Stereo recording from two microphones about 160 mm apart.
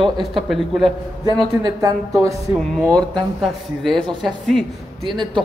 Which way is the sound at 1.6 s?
20° right (ahead or behind).